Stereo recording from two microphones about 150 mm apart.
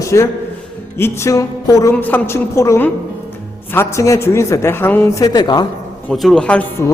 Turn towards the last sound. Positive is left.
turn(degrees=15)  # may be behind; listen again after turning